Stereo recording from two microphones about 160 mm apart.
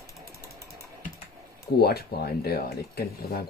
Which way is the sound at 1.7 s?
80° left.